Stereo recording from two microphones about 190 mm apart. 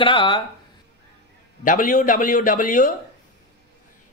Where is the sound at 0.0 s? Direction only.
25° left (ahead or behind).